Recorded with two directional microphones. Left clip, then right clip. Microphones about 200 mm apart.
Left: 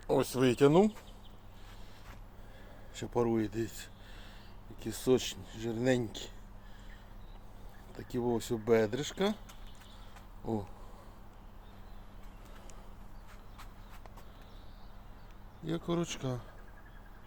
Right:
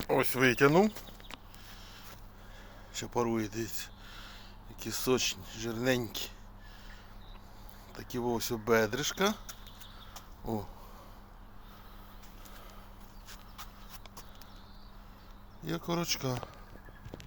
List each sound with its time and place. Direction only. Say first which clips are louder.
0.1 s speech: right 2 dB; 10° left (ahead or behind)
2.9 s speech: even; 20° left (ahead or behind)
7.9 s speech: even; 10° left (ahead or behind)
10.4 s speech: even; 5° left (ahead or behind)
15.6 s speech: right 1 dB; 5° left (ahead or behind)